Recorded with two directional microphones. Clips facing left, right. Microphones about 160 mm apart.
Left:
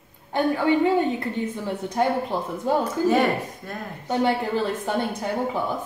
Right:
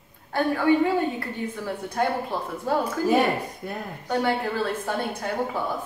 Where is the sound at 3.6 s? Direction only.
15° right (ahead or behind).